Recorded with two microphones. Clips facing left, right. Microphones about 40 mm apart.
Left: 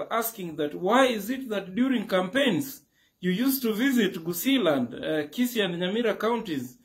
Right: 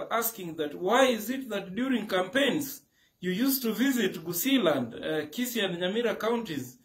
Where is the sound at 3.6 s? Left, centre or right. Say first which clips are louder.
Left 4 dB; centre.